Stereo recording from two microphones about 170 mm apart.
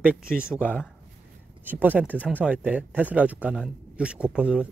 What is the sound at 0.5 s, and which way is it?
Speech, 10° left (ahead or behind).